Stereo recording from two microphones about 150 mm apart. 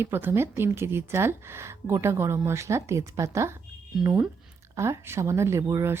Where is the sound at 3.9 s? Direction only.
5° right (ahead or behind).